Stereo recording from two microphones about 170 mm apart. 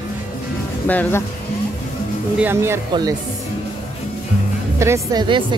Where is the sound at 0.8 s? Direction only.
10° left (ahead or behind).